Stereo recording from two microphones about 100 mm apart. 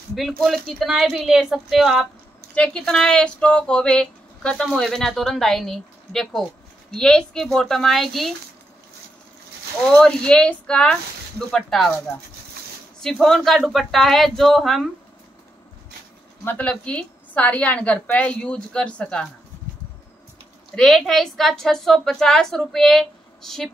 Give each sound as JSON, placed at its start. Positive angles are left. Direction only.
{"t": 0.4, "sound": "a woman's voice", "side_deg": 0}
{"t": 2.5, "sound": "a woman's voice", "side_deg": 10}
{"t": 9.8, "sound": "speech", "side_deg": 10}
{"t": 13.0, "sound": "a woman's voice", "side_deg": 5}
{"t": 16.4, "sound": "speech", "side_deg": 15}
{"t": 20.7, "sound": "a woman's voice", "side_deg": 5}